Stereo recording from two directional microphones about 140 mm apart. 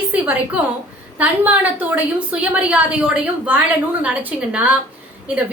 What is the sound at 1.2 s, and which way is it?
A woman's voice, 10° right (ahead or behind).